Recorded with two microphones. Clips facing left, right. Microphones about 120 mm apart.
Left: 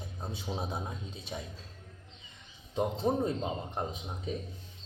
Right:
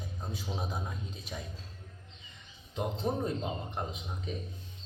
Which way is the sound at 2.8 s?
25° left (ahead or behind).